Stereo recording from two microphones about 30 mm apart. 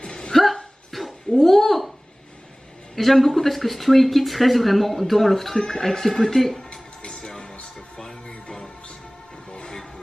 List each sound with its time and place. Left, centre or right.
0.0 s hiccup: left
0.3 s hiccup: centre
0.9 s dog: centre
1.3 s a sound: centre
3.0 s speech: centre
7.1 s music: centre
9.5 s train: left